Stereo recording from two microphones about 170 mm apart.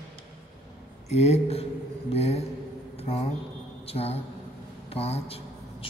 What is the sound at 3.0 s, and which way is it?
Mantra, 35° left (ahead or behind).